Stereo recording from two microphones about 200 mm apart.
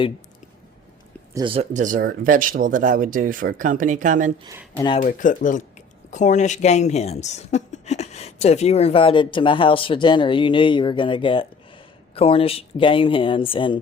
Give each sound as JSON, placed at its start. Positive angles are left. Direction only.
{"t": 1.3, "sound": "speech", "side_deg": -20}
{"t": 1.5, "sound": "speech", "side_deg": -40}
{"t": 4.9, "sound": "speech", "side_deg": 40}